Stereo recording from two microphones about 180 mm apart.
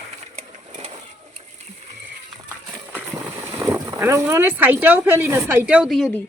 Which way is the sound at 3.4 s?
15° right (ahead or behind).